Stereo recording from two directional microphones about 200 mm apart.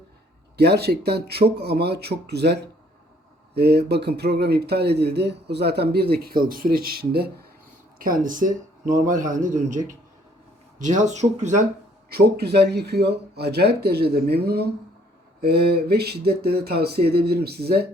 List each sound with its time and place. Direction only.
0.5 s a man's voice: 55° right (ahead or behind); by 11.6 s 35° right (ahead or behind)
12.1 s speech: 55° right (ahead or behind)